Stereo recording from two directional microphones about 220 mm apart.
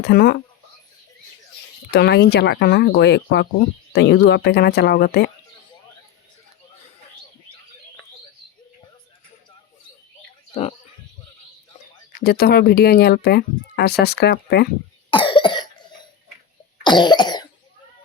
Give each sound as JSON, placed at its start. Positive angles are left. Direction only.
{"t": 0.0, "sound": "speech", "side_deg": 45}
{"t": 1.9, "sound": "speech", "side_deg": 50}
{"t": 10.5, "sound": "speech", "side_deg": 30}
{"t": 12.2, "sound": "speech", "side_deg": 45}
{"t": 15.1, "sound": "cough", "side_deg": 20}